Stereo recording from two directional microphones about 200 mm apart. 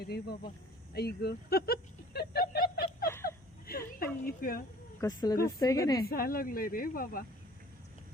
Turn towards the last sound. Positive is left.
turn(degrees=45)  # may be behind; listen again after turning